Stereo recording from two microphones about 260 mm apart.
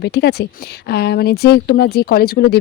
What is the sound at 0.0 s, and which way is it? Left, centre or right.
Speech, left.